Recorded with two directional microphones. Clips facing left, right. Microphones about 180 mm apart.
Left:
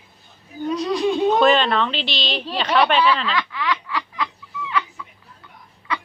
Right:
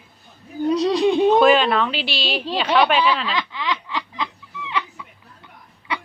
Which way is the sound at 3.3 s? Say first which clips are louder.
Left 1 dB; 20° right (ahead or behind).